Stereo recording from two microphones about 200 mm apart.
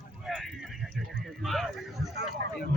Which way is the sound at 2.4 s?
55° right (ahead or behind).